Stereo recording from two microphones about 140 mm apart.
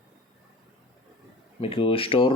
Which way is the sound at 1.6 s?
40° left (ahead or behind).